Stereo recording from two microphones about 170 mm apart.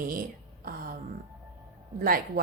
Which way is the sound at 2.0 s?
60° right (ahead or behind).